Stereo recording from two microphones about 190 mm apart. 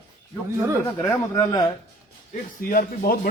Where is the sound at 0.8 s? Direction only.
15° left (ahead or behind).